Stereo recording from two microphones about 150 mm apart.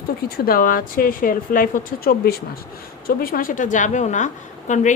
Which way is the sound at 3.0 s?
75° left (ahead or behind).